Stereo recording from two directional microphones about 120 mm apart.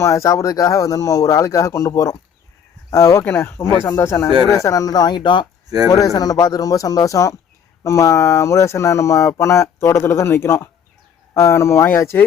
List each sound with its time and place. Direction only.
0.0 s speech: 25° left (ahead or behind); by 5.5 s 40° left (ahead or behind)
5.6 s speech: 30° right (ahead or behind)
5.9 s speech: 30° left (ahead or behind)